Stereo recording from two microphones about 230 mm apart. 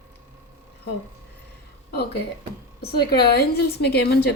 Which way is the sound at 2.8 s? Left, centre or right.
Left.